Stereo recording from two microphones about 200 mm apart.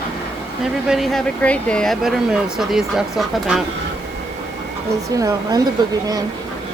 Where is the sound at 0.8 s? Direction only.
Centre (ahead or behind).